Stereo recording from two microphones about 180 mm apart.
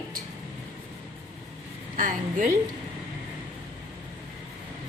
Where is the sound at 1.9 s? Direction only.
45° right (ahead or behind).